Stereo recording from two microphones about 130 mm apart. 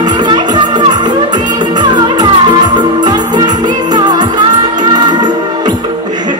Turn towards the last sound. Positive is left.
turn(degrees=-35)  # may be behind; listen again after turning